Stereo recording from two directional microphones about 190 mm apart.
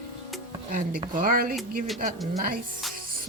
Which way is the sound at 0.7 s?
45° right (ahead or behind).